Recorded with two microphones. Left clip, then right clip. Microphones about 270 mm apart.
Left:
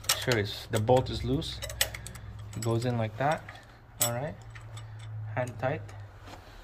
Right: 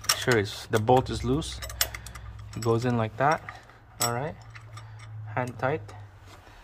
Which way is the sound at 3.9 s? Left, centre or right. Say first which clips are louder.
Right 3 dB; right.